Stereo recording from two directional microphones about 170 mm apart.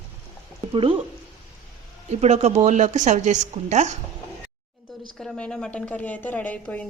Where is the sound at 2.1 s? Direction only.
40° right (ahead or behind).